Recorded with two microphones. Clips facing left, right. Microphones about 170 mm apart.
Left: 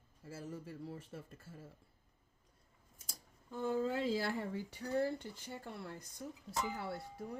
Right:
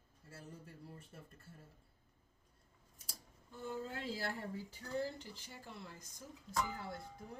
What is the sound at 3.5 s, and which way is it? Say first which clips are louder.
Speech: left 8 dB; 90° left.